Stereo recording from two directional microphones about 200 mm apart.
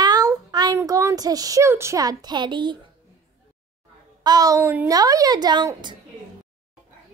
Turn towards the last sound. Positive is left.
turn(degrees=-20)  # may be behind; listen again after turning